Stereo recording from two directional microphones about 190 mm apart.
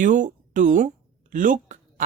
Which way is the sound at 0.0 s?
40° right (ahead or behind).